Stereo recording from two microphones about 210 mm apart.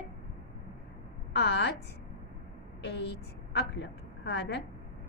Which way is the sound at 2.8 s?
55° left (ahead or behind).